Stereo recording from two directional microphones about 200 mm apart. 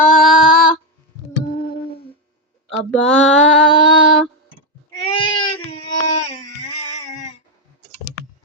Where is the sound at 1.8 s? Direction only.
50° left (ahead or behind).